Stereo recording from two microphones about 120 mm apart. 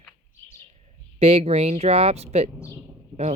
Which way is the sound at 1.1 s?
55° right (ahead or behind).